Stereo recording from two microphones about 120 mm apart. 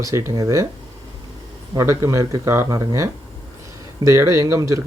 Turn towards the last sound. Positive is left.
turn(degrees=-25)  # may be behind; listen again after turning